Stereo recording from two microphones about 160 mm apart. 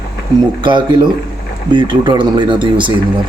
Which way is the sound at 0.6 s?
30° right (ahead or behind).